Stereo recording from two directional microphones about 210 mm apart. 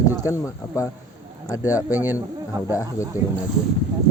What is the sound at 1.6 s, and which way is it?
A man's voice, 10° right (ahead or behind).